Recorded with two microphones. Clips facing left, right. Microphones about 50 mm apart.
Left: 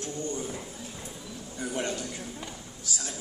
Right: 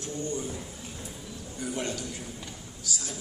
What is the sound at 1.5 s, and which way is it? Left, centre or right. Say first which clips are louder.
Speech: left 1 dB; left.